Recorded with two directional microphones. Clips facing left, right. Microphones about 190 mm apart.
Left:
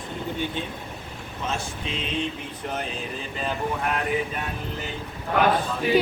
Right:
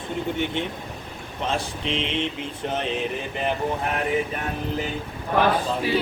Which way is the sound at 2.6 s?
25° right (ahead or behind).